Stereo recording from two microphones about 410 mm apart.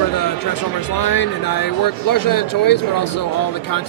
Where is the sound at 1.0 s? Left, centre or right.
Left.